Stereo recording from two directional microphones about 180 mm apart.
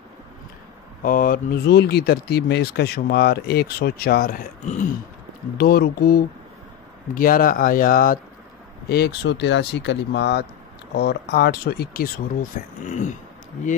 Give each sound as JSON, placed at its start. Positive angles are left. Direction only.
{"t": 1.0, "sound": "speech", "side_deg": 50}
{"t": 8.8, "sound": "speech", "side_deg": 65}